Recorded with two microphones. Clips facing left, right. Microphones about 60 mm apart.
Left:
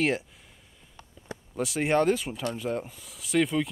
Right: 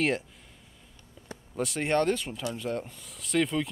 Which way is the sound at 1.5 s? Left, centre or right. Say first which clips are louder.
Left 2 dB; centre.